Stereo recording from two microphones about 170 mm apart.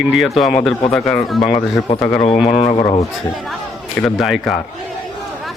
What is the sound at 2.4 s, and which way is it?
Speech, 30° left (ahead or behind).